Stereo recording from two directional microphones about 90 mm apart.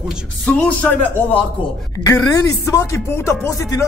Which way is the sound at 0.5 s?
15° left (ahead or behind).